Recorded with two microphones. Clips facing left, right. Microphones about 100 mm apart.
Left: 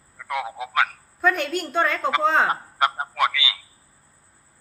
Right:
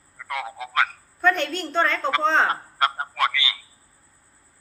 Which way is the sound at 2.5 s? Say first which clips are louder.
Left 1 dB; 20° left (ahead or behind).